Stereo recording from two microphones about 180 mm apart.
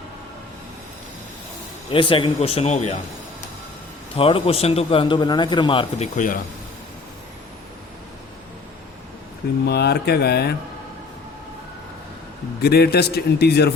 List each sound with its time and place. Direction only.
1.9 s a man's voice: 30° left (ahead or behind)
4.1 s a man's voice: 30° left (ahead or behind)
6.1 s speech: 50° left (ahead or behind)
9.6 s a man's voice: 65° left (ahead or behind)
12.6 s a man's voice: 60° left (ahead or behind)